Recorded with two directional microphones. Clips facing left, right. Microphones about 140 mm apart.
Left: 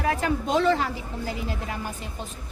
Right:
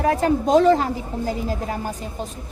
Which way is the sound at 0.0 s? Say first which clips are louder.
Right 6 dB; 40° right (ahead or behind).